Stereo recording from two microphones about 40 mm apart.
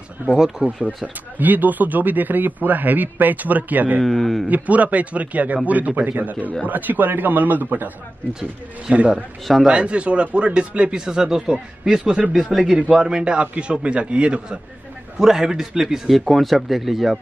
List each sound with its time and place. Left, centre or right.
0.6 s a man's voice: right
4.0 s speech: centre
4.5 s a man's voice: right
8.9 s a man's voice: right; by 13.2 s centre
13.2 s speech: right
15.1 s a man's voice: centre